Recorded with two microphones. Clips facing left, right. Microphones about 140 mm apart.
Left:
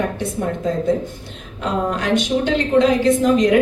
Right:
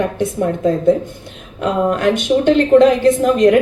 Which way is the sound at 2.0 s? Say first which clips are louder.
Right 5 dB; 50° right (ahead or behind).